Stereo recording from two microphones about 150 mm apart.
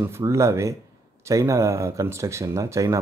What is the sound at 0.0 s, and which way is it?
Speech, 20° right (ahead or behind).